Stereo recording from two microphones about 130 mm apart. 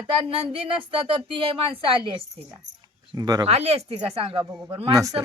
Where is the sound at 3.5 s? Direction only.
55° right (ahead or behind).